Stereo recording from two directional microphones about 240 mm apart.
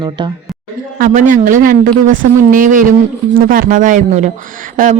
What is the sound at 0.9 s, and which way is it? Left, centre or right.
Speech, right.